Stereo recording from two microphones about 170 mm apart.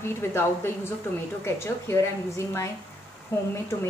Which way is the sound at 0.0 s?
15° left (ahead or behind).